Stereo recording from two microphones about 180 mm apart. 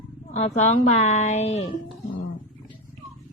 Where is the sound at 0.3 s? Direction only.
40° left (ahead or behind).